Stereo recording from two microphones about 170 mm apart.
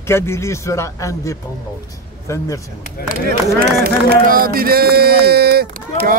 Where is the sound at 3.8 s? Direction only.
60° right (ahead or behind).